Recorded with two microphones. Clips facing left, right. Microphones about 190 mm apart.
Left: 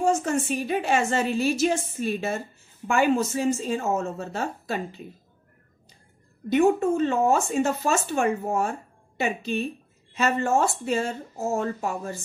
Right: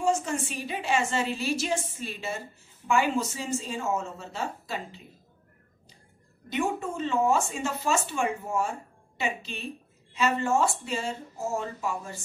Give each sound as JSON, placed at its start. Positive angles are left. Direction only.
{"t": 0.0, "sound": "a woman's voice", "side_deg": 45}
{"t": 6.5, "sound": "a woman's voice", "side_deg": 50}